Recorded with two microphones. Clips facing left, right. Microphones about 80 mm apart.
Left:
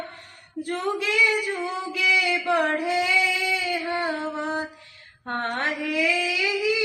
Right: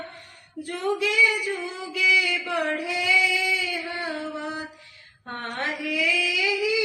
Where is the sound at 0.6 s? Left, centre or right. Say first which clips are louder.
Right 1 dB; left.